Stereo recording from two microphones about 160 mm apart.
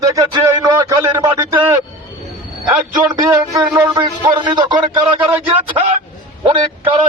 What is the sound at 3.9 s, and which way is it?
Speech, 30° right (ahead or behind).